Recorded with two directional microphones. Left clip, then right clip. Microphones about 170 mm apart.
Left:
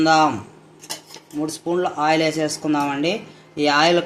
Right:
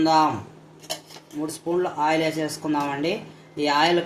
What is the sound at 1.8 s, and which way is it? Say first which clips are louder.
A man's voice: left 4 dB; 45° left (ahead or behind).